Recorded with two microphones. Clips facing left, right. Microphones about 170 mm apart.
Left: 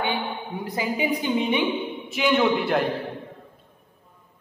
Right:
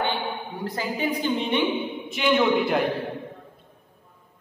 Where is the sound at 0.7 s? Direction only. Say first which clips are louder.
Left 2 dB; 10° left (ahead or behind).